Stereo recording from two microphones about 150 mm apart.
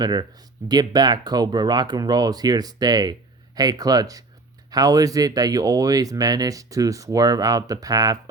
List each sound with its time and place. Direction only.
0.0 s speech: 30° right (ahead or behind)